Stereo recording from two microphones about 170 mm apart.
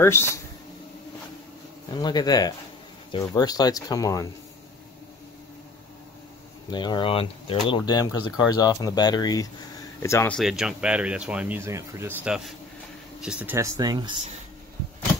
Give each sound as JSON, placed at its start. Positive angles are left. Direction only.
{"t": 0.0, "sound": "speech", "side_deg": 15}
{"t": 2.0, "sound": "speech", "side_deg": 25}
{"t": 6.7, "sound": "speech", "side_deg": 25}
{"t": 10.3, "sound": "speech", "side_deg": 0}
{"t": 13.7, "sound": "speech", "side_deg": -25}